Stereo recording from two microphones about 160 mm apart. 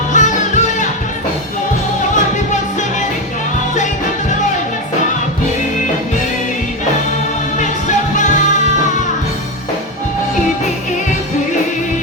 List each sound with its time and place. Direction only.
0.1 s music: 50° left (ahead or behind)
7.6 s music: 50° left (ahead or behind)